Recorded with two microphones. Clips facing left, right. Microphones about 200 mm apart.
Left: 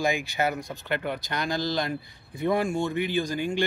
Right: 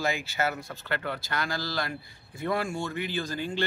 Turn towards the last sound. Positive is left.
turn(degrees=15)  # may be behind; listen again after turning